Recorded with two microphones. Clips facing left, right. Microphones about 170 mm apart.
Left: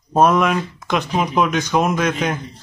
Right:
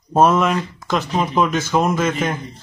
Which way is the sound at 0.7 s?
Centre (ahead or behind).